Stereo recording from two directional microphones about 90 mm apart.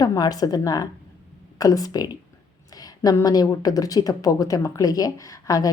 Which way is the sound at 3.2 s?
45° left (ahead or behind).